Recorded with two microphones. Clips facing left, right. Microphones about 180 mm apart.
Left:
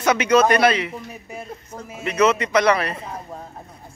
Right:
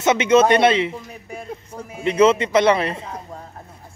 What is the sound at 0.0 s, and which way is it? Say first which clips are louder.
Speech: right 2 dB; 25° right (ahead or behind).